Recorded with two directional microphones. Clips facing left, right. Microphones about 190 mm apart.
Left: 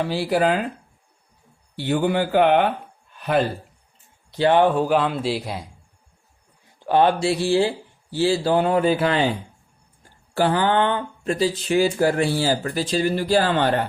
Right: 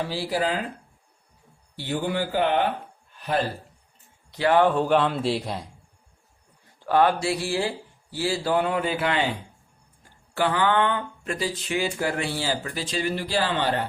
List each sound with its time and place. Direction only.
0.1 s a man's voice: 60° left (ahead or behind)
1.7 s a man's voice: 65° left (ahead or behind)
3.2 s a sound: 60° left (ahead or behind)
4.3 s speech: 30° left (ahead or behind)
4.7 s a man's voice: 5° left (ahead or behind)
6.7 s speech: 20° left (ahead or behind)
10.3 s speech: 35° left (ahead or behind); by 13.8 s 50° left (ahead or behind)